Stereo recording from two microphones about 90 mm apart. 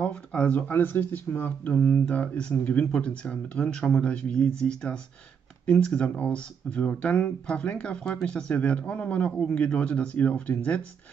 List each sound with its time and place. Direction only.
0.0 s speech: 15° left (ahead or behind)